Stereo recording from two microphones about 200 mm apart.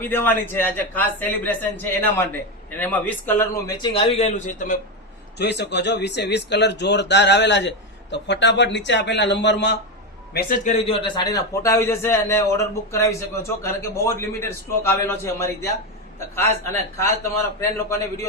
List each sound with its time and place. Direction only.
0.0 s a man's voice: 10° left (ahead or behind); by 4.8 s 40° left (ahead or behind)
5.4 s speech: 60° left (ahead or behind)
10.3 s a man's voice: 40° left (ahead or behind); by 18.0 s 15° left (ahead or behind)